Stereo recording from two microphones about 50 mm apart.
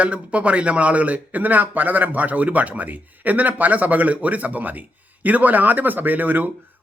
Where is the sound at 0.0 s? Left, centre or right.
Right.